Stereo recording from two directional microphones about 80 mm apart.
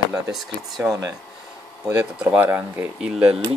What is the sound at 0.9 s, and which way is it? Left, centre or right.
Speech, right.